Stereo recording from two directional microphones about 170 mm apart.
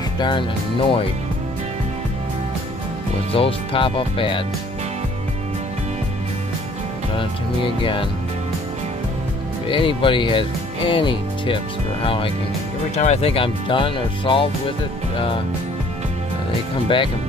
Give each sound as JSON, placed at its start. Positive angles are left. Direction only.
{"t": 0.2, "sound": "speech", "side_deg": 30}
{"t": 3.3, "sound": "speech", "side_deg": 30}
{"t": 7.8, "sound": "speech", "side_deg": 30}
{"t": 9.7, "sound": "speech", "side_deg": 30}